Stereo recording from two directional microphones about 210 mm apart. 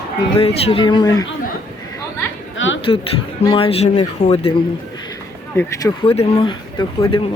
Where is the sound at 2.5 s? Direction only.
65° left (ahead or behind).